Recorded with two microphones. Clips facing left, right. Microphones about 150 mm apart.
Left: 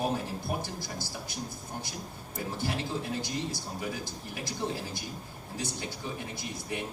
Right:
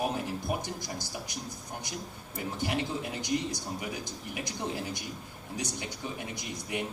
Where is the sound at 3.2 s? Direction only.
20° right (ahead or behind).